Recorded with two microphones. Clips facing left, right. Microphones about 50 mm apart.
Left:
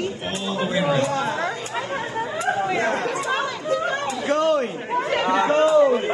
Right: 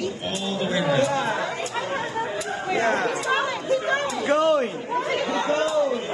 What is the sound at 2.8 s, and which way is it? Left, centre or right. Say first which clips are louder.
Speech: right 1 dB; right.